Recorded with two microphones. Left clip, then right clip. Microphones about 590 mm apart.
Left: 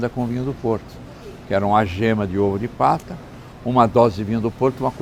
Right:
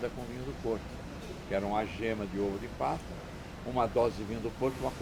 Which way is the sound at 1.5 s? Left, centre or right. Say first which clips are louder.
Left 15 dB; left.